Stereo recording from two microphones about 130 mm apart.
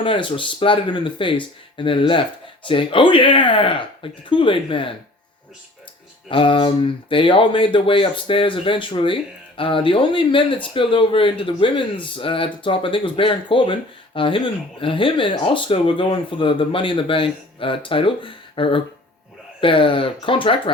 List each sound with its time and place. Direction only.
0.0 s speech: 40° left (ahead or behind)
6.2 s speech: 40° left (ahead or behind)